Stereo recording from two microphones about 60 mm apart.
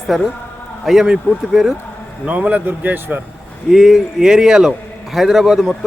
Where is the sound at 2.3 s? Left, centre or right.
Right.